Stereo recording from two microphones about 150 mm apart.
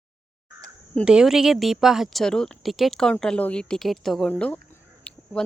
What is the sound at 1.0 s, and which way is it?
Speech, 5° right (ahead or behind).